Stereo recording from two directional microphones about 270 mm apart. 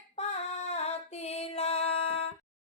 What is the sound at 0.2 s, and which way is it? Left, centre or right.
Female singing, left.